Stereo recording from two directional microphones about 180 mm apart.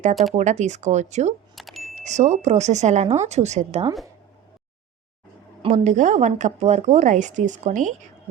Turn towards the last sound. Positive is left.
turn(degrees=-45)  # may be behind; listen again after turning